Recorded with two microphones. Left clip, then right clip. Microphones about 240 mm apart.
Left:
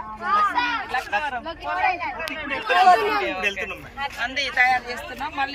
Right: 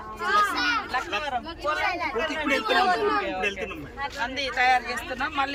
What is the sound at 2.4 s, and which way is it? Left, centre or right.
Speech, centre.